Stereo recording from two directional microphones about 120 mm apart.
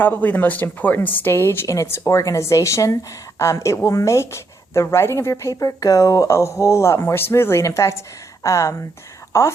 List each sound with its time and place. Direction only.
0.0 s a woman's voice: 15° left (ahead or behind)